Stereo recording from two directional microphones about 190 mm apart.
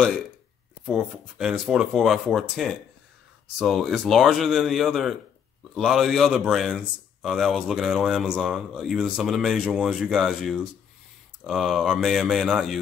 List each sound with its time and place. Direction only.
0.8 s a man's voice: 5° right (ahead or behind)